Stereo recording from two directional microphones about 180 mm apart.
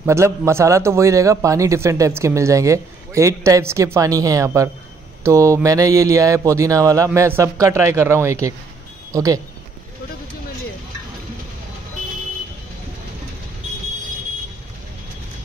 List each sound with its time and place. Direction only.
0.0 s a man's voice: 15° right (ahead or behind)